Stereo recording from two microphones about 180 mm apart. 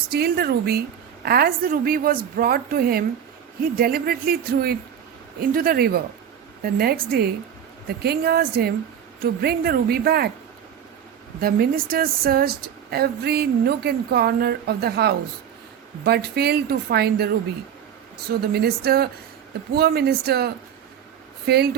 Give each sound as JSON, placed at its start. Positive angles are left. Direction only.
{"t": 0.1, "sound": "speech", "side_deg": -60}
{"t": 11.3, "sound": "speech", "side_deg": -55}